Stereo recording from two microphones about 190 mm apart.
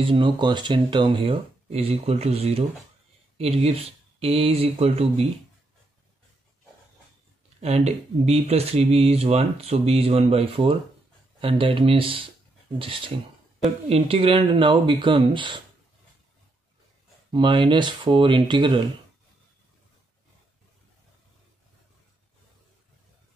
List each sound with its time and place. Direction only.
0.0 s speech: 25° right (ahead or behind)
7.6 s speech: 35° right (ahead or behind)
17.3 s speech: 25° right (ahead or behind)